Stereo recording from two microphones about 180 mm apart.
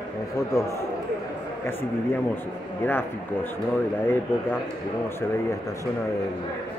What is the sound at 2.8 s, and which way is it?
Speech, 10° left (ahead or behind).